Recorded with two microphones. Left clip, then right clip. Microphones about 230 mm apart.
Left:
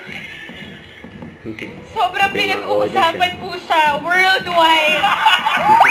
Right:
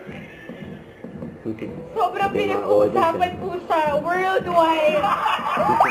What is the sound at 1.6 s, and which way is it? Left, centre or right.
Speech, centre.